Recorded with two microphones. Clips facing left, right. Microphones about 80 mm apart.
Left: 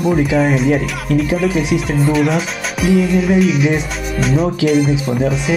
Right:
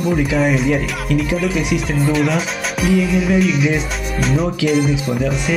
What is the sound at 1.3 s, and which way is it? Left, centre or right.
Music, left.